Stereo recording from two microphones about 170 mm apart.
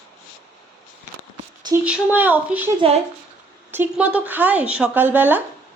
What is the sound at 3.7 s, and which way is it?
A woman's voice, 10° right (ahead or behind).